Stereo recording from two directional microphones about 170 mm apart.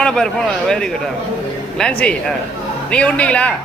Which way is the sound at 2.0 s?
5° left (ahead or behind).